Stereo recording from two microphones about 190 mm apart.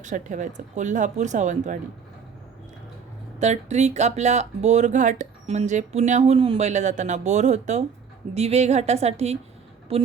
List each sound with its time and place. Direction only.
0.0 s speech: 40° right (ahead or behind)
3.4 s speech: 35° right (ahead or behind)